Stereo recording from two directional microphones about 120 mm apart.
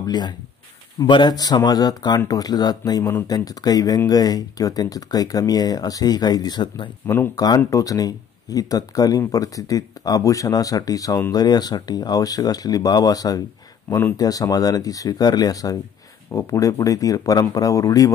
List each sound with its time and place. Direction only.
0.0 s speech: 35° left (ahead or behind)